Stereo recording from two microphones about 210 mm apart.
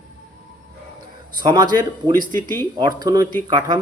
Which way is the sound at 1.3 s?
20° right (ahead or behind).